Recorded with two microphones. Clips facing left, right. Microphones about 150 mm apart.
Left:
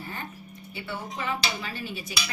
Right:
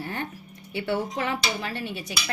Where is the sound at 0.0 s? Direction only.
75° right (ahead or behind).